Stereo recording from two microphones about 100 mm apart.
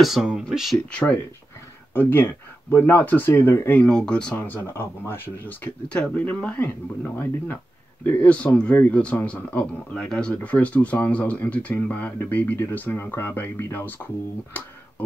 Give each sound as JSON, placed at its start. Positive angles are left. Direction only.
{"t": 0.0, "sound": "speech", "side_deg": -5}
{"t": 2.0, "sound": "speech", "side_deg": 20}
{"t": 4.4, "sound": "speech", "side_deg": 20}
{"t": 8.0, "sound": "speech", "side_deg": 15}